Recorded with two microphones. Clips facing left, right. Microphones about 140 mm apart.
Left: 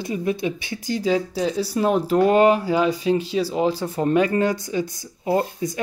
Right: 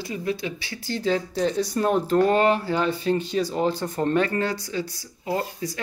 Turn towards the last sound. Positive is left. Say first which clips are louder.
# left 5 dB
turn(degrees=20)  # may be behind; listen again after turning